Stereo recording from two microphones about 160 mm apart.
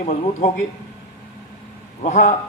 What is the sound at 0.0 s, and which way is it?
Speech, 45° left (ahead or behind).